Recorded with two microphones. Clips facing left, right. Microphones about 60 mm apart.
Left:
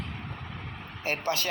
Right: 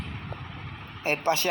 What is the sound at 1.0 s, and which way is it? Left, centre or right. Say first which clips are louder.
Speech: right 4 dB; right.